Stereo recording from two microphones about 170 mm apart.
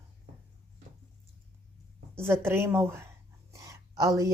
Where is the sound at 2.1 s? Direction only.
15° right (ahead or behind).